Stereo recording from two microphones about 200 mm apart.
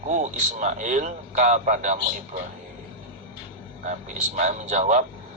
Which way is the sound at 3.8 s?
35° right (ahead or behind).